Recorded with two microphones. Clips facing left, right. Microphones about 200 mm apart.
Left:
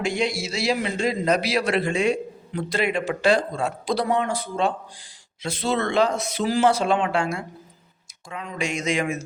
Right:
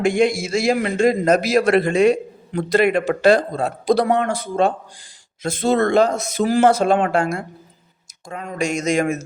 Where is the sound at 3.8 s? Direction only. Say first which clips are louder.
Right 7 dB; 50° right (ahead or behind).